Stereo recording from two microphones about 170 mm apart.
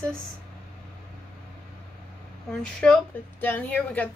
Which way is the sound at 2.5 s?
5° left (ahead or behind).